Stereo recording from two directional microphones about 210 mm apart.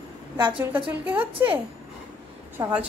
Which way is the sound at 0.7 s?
10° right (ahead or behind).